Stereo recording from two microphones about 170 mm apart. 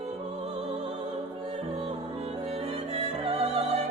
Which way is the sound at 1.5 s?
35° right (ahead or behind).